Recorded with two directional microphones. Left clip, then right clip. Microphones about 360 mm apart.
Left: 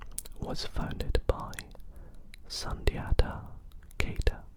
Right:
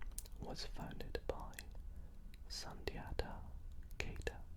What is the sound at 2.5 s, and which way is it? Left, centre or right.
Speech, left.